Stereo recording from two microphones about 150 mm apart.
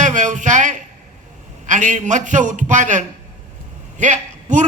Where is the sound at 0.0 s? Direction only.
55° right (ahead or behind).